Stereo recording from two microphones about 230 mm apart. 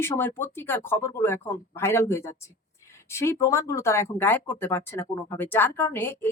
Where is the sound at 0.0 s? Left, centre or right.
Centre.